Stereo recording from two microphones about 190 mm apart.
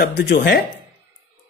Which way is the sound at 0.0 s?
60° left (ahead or behind).